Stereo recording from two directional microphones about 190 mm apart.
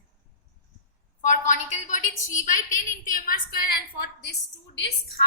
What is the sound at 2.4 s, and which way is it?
A woman's voice, 45° left (ahead or behind).